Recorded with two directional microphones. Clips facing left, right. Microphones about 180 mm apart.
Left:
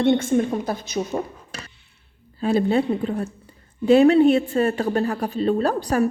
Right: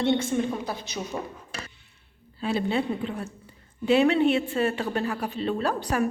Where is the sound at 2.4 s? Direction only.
45° left (ahead or behind).